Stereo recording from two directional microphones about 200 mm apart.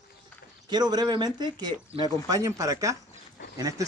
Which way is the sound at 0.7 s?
20° right (ahead or behind).